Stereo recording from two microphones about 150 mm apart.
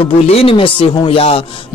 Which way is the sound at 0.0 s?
40° left (ahead or behind).